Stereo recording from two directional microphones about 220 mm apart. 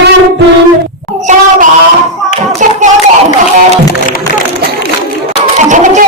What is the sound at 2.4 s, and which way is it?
Hands, 35° right (ahead or behind).